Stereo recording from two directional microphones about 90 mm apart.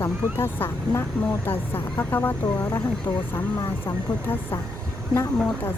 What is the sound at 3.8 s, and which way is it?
Speech, 25° left (ahead or behind).